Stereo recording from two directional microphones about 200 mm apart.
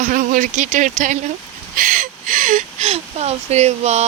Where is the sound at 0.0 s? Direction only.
40° right (ahead or behind).